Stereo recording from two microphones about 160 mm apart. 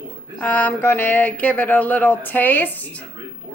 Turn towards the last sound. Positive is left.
turn(degrees=10)  # may be behind; listen again after turning